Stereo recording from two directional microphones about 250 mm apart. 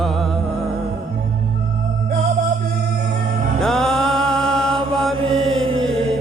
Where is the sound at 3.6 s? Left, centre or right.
Centre.